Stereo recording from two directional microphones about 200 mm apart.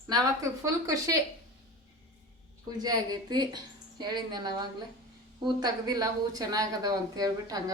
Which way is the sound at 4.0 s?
20° right (ahead or behind).